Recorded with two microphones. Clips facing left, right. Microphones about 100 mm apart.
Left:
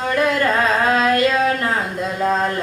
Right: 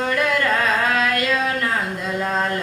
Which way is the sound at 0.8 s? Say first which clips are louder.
Left 4 dB; 25° left (ahead or behind).